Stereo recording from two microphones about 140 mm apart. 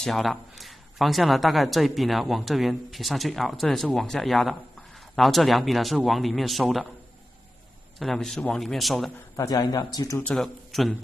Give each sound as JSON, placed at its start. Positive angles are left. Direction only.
{"t": 0.0, "sound": "speech", "side_deg": 0}
{"t": 8.0, "sound": "speech", "side_deg": 0}
{"t": 9.4, "sound": "speech", "side_deg": 25}
{"t": 10.2, "sound": "speech", "side_deg": 0}